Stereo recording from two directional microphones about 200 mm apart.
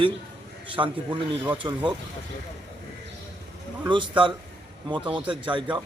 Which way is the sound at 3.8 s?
25° right (ahead or behind).